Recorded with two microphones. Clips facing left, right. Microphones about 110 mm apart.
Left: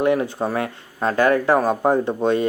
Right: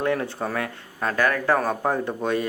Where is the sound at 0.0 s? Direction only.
15° left (ahead or behind).